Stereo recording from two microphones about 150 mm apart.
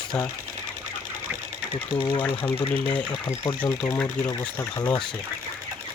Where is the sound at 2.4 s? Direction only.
10° left (ahead or behind).